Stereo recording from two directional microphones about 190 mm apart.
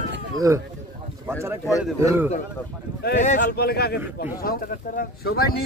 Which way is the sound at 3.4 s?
55° left (ahead or behind).